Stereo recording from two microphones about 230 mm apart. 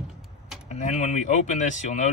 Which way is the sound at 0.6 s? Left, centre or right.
Left.